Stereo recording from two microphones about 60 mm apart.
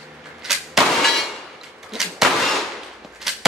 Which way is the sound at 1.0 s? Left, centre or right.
Centre.